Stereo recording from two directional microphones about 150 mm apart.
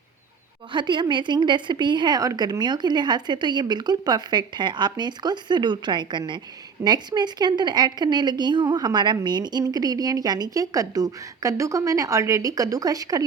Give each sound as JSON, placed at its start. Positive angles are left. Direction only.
{"t": 0.7, "sound": "a woman's voice", "side_deg": -30}